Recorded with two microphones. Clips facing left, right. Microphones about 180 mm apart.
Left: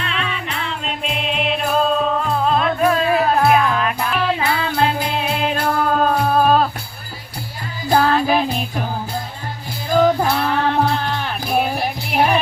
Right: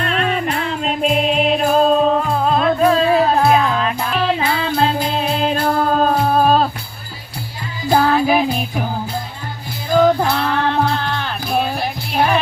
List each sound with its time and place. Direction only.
0.0 s music: 45° right (ahead or behind); by 6.7 s 30° right (ahead or behind)
7.9 s music: 15° right (ahead or behind)
10.2 s music: 5° left (ahead or behind)